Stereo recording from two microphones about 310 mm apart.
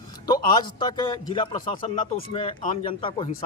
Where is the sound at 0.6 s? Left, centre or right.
Centre.